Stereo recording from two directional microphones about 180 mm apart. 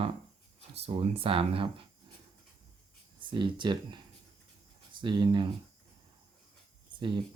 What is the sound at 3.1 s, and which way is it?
Speech, 25° right (ahead or behind).